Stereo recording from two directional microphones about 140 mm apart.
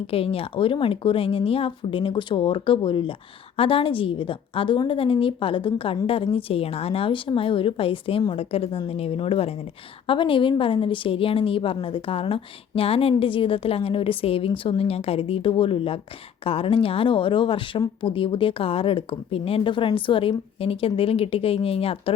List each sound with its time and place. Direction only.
0.1 s a woman's voice: 45° left (ahead or behind)